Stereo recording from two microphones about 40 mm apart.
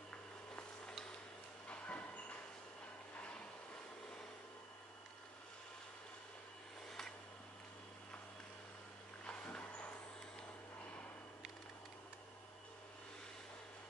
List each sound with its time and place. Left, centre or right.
1.7 s train: left
9.2 s vehicle: left